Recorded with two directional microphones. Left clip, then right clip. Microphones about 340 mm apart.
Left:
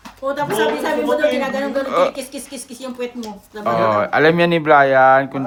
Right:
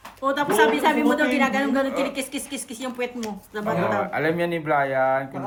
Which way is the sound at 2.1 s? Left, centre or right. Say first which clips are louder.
Left 1 dB; right.